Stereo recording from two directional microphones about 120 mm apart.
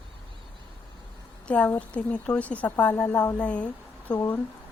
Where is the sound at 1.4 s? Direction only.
10° left (ahead or behind).